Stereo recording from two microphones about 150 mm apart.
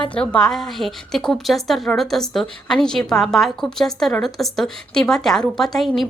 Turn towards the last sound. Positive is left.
turn(degrees=0)  # may be behind; listen again after turning